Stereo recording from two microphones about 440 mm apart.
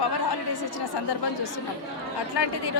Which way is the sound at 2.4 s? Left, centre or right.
Left.